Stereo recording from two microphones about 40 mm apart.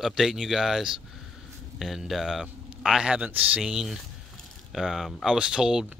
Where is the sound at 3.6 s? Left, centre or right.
Centre.